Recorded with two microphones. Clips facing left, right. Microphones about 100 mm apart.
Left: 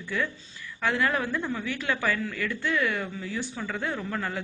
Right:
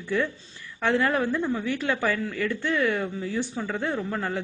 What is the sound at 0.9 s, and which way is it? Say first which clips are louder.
Speech: right 4 dB; 35° right (ahead or behind).